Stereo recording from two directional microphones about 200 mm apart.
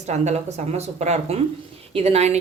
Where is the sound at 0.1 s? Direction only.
35° right (ahead or behind).